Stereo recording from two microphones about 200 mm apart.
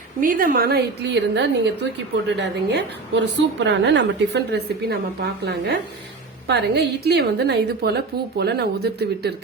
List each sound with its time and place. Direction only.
0.2 s a woman's voice: 45° right (ahead or behind)